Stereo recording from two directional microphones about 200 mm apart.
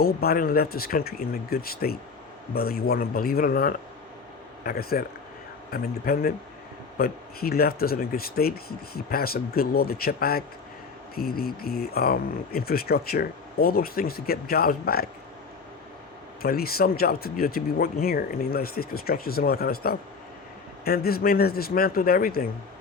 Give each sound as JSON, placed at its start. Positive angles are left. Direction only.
{"t": 0.0, "sound": "speech", "side_deg": 50}
{"t": 16.4, "sound": "speech", "side_deg": 50}